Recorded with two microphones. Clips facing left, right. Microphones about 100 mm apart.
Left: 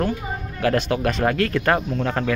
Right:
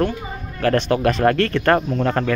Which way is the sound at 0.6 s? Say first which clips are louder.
Right 3 dB; 10° left (ahead or behind).